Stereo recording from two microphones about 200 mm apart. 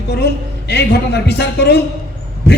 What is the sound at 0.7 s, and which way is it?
Speech, 55° left (ahead or behind).